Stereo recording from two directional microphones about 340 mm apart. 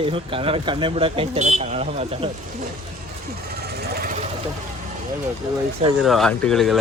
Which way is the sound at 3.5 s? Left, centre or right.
Right.